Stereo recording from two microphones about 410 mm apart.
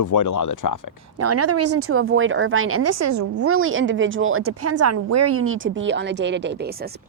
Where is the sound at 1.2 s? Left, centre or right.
Right.